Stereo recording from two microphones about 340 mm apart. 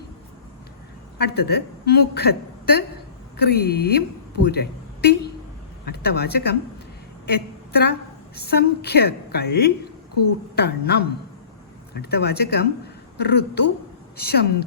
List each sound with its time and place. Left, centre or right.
1.2 s a woman's voice: left
12.1 s a woman's voice: left